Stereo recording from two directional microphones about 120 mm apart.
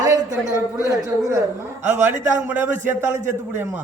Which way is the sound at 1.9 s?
15° right (ahead or behind).